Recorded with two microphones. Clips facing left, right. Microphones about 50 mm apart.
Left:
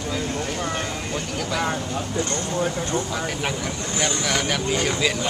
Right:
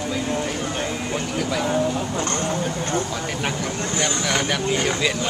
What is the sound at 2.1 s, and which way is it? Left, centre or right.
Speech, right.